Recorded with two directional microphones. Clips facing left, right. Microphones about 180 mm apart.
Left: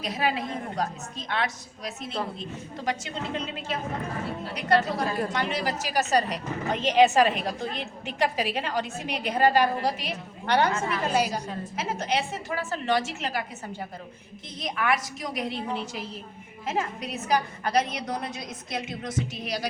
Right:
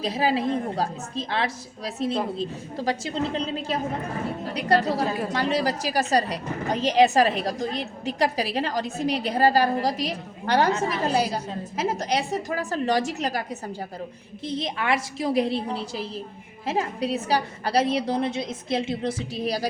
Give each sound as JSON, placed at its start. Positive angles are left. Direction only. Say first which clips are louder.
{"t": 0.0, "sound": "a woman's voice", "louder": "right 5 dB", "side_deg": -30}
{"t": 14.4, "sound": "a woman's voice", "louder": "right 2 dB", "side_deg": -30}